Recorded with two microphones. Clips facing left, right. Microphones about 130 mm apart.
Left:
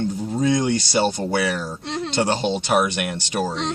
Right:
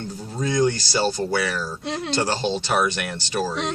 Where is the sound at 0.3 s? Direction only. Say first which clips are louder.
Left 1 dB; 20° left (ahead or behind).